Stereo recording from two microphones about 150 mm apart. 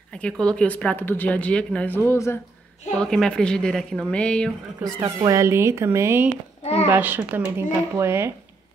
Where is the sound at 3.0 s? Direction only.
5° left (ahead or behind).